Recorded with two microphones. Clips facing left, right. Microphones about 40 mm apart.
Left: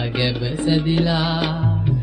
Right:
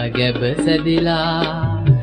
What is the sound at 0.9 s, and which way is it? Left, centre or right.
Music, centre.